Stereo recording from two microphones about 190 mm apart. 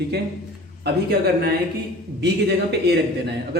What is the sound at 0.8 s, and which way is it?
A man's voice, 55° right (ahead or behind).